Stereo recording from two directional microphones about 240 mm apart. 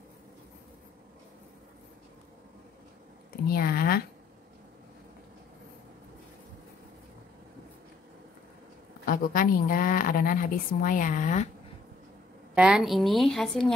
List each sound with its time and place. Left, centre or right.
3.4 s a woman's voice: left
9.0 s a woman's voice: left
12.5 s a woman's voice: centre